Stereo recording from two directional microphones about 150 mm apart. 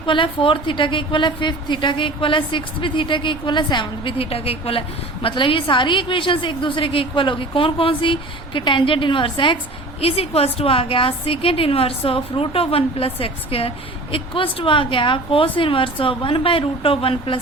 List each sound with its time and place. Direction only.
0.0 s a woman's voice: 35° left (ahead or behind)